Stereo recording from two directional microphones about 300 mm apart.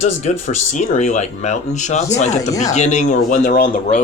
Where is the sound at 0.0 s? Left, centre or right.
Left.